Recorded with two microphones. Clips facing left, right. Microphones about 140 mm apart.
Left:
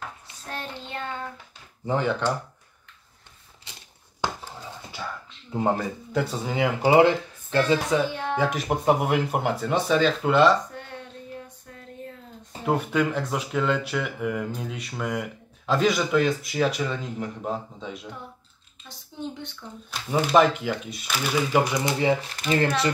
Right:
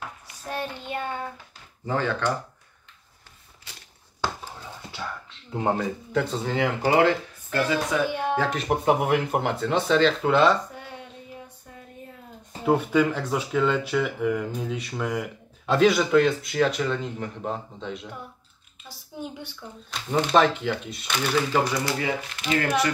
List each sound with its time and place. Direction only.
0.5 s child singing: 15° right (ahead or behind)
1.9 s speech: 15° left (ahead or behind)
4.2 s a sound: 15° left (ahead or behind)
5.5 s speech: 5° left (ahead or behind); by 8.0 s 25° left (ahead or behind)
8.1 s music: 15° right (ahead or behind)
8.4 s speech: 5° left (ahead or behind)
12.6 s speech: centre (ahead or behind)
18.9 s a woman's voice: 10° right (ahead or behind)
19.9 s speech: 5° left (ahead or behind)
21.5 s speech: 15° left (ahead or behind)